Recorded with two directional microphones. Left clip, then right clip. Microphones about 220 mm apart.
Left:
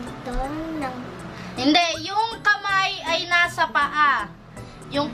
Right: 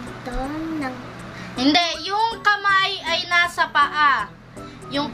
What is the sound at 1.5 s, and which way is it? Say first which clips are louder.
Speech: right 1 dB; 20° right (ahead or behind).